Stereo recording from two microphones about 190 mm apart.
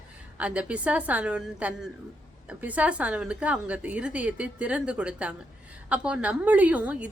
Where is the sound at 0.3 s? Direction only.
5° right (ahead or behind).